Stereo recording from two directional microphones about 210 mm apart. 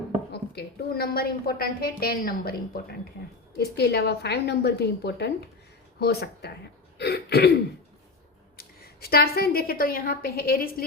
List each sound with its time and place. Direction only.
0.3 s a woman's voice: 50° left (ahead or behind)
8.5 s a woman's voice: 45° left (ahead or behind)